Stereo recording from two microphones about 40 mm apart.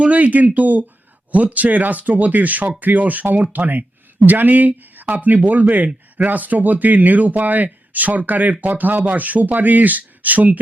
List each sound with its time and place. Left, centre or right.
0.0 s speech: right